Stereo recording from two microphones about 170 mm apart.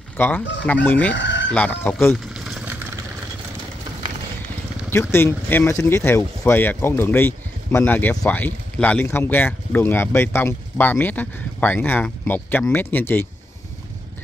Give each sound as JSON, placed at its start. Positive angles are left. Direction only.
{"t": 0.2, "sound": "speech", "side_deg": 15}
{"t": 1.1, "sound": "chicken", "side_deg": 90}
{"t": 1.5, "sound": "speech", "side_deg": 5}
{"t": 2.4, "sound": "vehicle", "side_deg": -5}
{"t": 4.8, "sound": "speech", "side_deg": 15}